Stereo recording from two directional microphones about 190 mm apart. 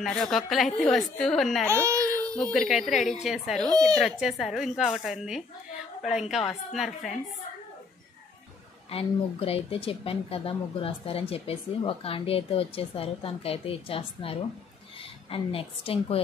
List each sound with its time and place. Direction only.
0.0 s a woman's voice: centre (ahead or behind)
1.7 s a child's voice: 15° right (ahead or behind)
2.3 s a woman's voice: 5° left (ahead or behind)
8.9 s speech: 30° left (ahead or behind)
15.3 s a woman's voice: 30° left (ahead or behind)